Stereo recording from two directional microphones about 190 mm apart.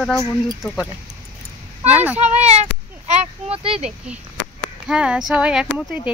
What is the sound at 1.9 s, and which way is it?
Speech, 5° right (ahead or behind).